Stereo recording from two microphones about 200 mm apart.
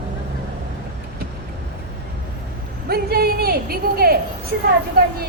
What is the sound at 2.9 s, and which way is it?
Speech, 50° right (ahead or behind).